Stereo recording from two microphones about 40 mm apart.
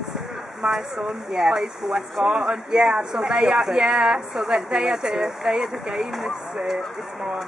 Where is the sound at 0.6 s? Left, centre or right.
Centre.